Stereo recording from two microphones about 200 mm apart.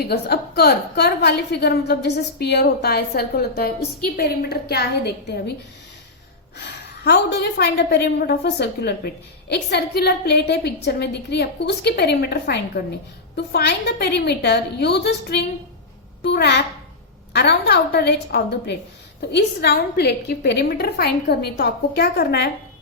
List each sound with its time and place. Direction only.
0.0 s a woman's voice: 55° left (ahead or behind)
6.6 s a woman's voice: 55° left (ahead or behind)